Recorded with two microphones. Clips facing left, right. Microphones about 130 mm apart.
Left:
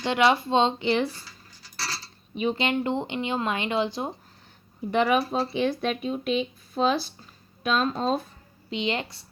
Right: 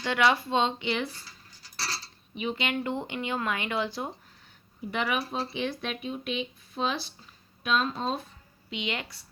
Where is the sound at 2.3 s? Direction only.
35° left (ahead or behind).